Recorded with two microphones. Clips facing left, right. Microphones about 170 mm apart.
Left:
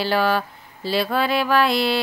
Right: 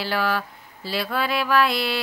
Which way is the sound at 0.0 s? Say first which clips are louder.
Left 4 dB; 30° left (ahead or behind).